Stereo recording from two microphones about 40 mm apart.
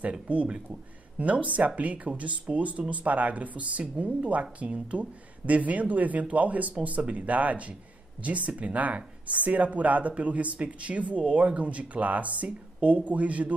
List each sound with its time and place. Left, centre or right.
0.3 s speech: right